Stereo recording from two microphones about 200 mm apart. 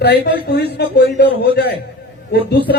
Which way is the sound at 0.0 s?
55° left (ahead or behind).